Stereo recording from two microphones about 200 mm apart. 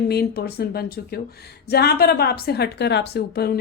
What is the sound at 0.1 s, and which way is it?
A woman's voice, 50° left (ahead or behind).